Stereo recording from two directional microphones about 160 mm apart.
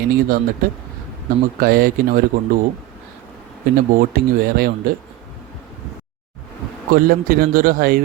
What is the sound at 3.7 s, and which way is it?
Speech, 65° right (ahead or behind).